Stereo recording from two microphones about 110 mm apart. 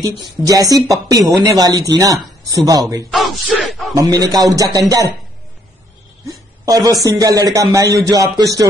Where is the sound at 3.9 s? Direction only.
30° right (ahead or behind).